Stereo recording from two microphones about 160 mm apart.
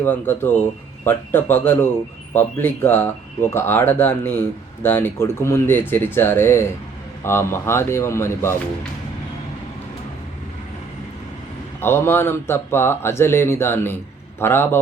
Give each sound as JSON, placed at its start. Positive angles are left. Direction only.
{"t": 0.0, "sound": "speech", "side_deg": 15}
{"t": 11.8, "sound": "speech", "side_deg": 15}